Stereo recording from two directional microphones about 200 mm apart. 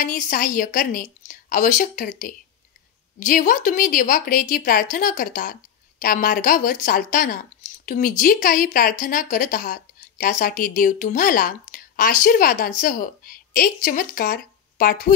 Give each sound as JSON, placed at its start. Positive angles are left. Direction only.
{"t": 0.0, "sound": "a woman's voice", "side_deg": 40}
{"t": 3.2, "sound": "a woman's voice", "side_deg": 40}